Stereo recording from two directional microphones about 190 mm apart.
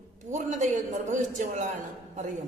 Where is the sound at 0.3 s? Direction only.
40° right (ahead or behind).